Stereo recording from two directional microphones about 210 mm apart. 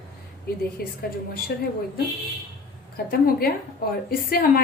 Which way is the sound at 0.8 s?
45° left (ahead or behind).